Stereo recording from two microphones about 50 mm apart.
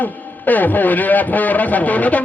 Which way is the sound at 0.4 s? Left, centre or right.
Left.